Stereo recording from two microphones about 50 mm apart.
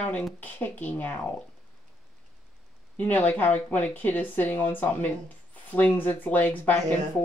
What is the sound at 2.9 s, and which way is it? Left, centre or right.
Speech, left.